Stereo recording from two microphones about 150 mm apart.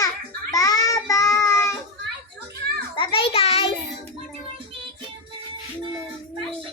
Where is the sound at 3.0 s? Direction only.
35° left (ahead or behind).